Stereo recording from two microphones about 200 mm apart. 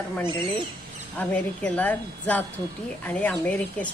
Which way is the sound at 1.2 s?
5° left (ahead or behind).